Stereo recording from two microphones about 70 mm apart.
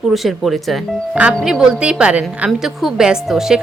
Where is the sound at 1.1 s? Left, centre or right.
Centre.